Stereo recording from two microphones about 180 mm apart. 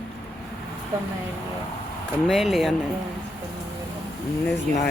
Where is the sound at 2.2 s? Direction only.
Centre (ahead or behind).